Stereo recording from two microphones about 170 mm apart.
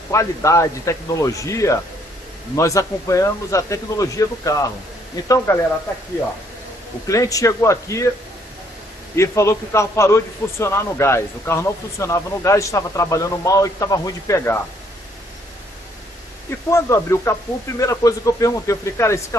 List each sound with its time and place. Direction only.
0.1 s a man's voice: 15° left (ahead or behind)
7.1 s speech: 20° left (ahead or behind)
9.1 s a man's voice: 15° left (ahead or behind)
16.7 s a man's voice: 15° left (ahead or behind)